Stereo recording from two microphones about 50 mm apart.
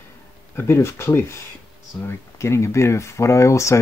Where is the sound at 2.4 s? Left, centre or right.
Left.